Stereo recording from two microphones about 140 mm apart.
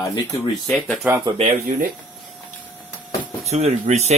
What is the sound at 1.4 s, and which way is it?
Speech, 65° right (ahead or behind).